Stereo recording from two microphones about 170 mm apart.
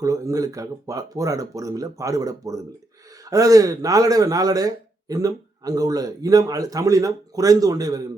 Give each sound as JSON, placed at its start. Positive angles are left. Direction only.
{"t": 0.0, "sound": "speech", "side_deg": -20}